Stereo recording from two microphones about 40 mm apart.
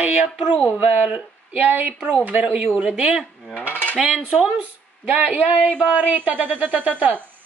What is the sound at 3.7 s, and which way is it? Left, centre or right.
Cutlery, left.